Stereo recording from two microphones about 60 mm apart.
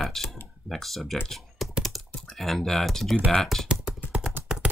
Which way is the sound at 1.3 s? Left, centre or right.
Centre.